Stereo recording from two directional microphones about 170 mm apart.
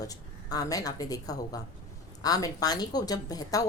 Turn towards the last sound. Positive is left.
turn(degrees=20)  # may be behind; listen again after turning